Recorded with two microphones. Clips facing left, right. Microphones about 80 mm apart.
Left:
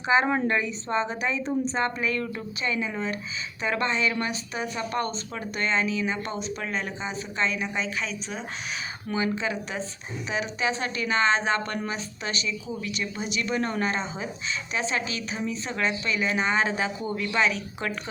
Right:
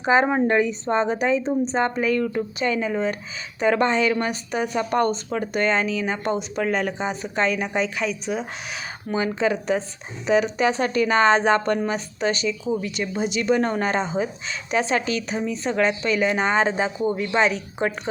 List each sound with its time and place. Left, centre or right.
0.2 s a woman's voice: right
2.0 s speech: right
3.9 s speech: right
4.8 s speech: right
5.3 s speech: right
8.3 s speech: centre
9.0 s speech: right
9.3 s speech: right
11.5 s a woman's voice: right
11.9 s speech: right
13.4 s speech: right